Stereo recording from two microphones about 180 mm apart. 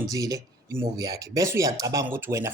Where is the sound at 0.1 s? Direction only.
20° right (ahead or behind).